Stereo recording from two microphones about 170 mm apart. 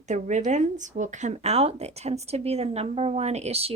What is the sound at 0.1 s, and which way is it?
A woman's voice, 45° right (ahead or behind).